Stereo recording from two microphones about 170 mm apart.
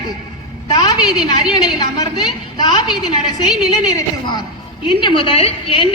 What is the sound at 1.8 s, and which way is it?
A woman's voice, 25° left (ahead or behind).